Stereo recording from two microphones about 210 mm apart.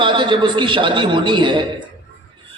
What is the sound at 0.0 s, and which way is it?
A man's voice, 20° right (ahead or behind).